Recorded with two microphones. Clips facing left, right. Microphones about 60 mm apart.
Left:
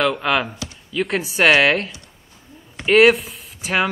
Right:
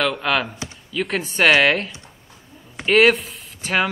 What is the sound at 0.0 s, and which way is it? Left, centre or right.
Speech, centre.